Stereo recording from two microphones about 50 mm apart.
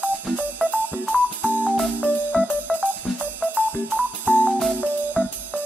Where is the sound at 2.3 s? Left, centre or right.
Right.